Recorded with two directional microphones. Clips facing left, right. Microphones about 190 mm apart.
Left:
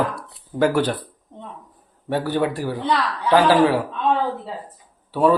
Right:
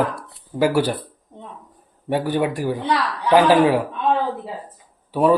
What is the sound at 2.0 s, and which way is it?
A man's voice, 15° right (ahead or behind).